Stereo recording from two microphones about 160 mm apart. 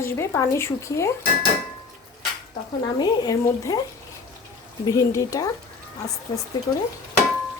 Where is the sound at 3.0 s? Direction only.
25° left (ahead or behind).